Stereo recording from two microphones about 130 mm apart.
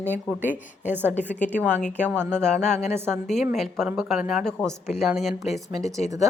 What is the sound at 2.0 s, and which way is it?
Speech, 15° right (ahead or behind).